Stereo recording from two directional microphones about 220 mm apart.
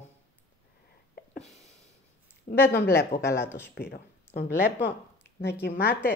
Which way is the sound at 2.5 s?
45° left (ahead or behind).